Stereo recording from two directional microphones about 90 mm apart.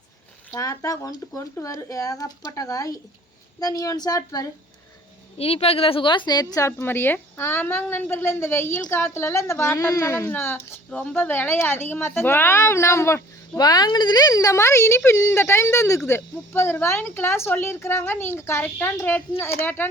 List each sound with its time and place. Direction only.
0.5 s speech: 35° left (ahead or behind)
5.4 s a woman's voice: 90° left; by 6.7 s 45° left (ahead or behind)
6.7 s speech: 25° left (ahead or behind)
13.6 s speech: 45° left (ahead or behind); by 19.9 s 25° left (ahead or behind)